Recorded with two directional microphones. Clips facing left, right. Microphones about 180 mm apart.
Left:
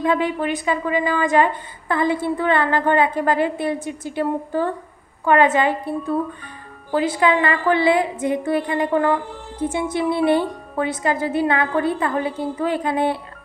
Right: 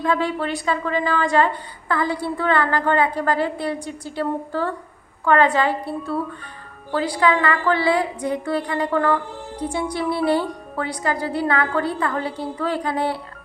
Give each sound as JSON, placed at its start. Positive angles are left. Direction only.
{"t": 0.0, "sound": "a woman's voice", "side_deg": 20}